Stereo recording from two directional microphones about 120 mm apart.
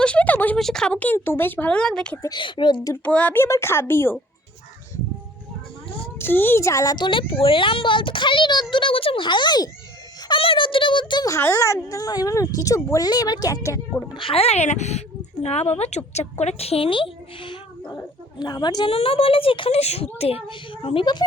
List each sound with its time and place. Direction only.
0.0 s a sound: 10° left (ahead or behind)
0.6 s speech: 5° left (ahead or behind)
2.3 s a woman's voice: 40° left (ahead or behind)
3.0 s speech: 10° left (ahead or behind)
3.4 s speech: 20° left (ahead or behind)
6.1 s a child's voice: 20° left (ahead or behind); by 11.3 s 40° left (ahead or behind)
11.3 s speech: 25° left (ahead or behind)
14.1 s a woman's voice: 50° left (ahead or behind)